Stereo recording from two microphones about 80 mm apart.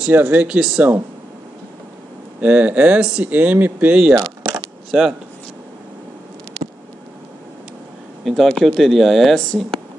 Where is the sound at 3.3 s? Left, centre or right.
Right.